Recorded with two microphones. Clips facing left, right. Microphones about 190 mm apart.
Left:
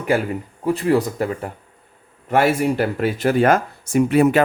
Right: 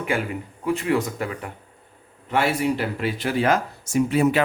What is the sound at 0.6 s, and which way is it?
Speech, 35° left (ahead or behind).